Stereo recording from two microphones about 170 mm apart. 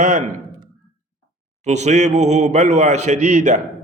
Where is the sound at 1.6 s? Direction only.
40° right (ahead or behind).